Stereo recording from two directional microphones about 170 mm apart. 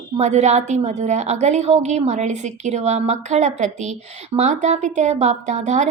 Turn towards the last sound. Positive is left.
turn(degrees=-40)  # may be behind; listen again after turning